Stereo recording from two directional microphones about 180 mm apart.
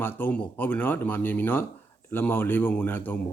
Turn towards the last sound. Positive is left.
turn(degrees=10)  # may be behind; listen again after turning